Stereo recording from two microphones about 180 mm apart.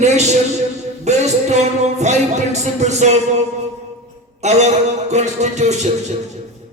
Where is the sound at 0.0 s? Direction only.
40° right (ahead or behind).